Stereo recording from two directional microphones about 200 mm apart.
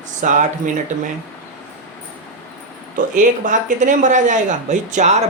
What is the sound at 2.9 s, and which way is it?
Speech, 40° right (ahead or behind).